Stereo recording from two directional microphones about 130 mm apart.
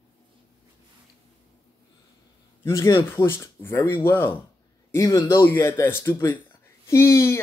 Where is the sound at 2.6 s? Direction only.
30° left (ahead or behind).